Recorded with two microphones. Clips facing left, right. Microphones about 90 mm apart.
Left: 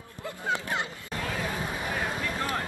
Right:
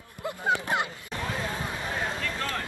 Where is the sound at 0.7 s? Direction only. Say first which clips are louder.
Right 3 dB; 20° right (ahead or behind).